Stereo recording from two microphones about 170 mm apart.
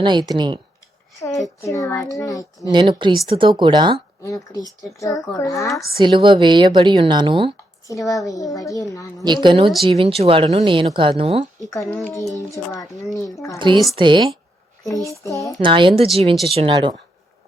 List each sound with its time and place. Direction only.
0.0 s a woman's voice: 25° right (ahead or behind)
1.6 s a woman's voice: 20° left (ahead or behind)
2.6 s a woman's voice: 25° right (ahead or behind)
4.2 s a woman's voice: 20° left (ahead or behind)
6.0 s a woman's voice: 30° right (ahead or behind)
7.9 s a woman's voice: 20° left (ahead or behind)
9.2 s a woman's voice: 25° right (ahead or behind)
11.8 s a child's voice: 5° left (ahead or behind)
12.4 s a woman's voice: 20° left (ahead or behind)
13.6 s a woman's voice: 30° right (ahead or behind)
14.8 s a woman's voice: 20° left (ahead or behind)
15.6 s a woman's voice: 30° right (ahead or behind)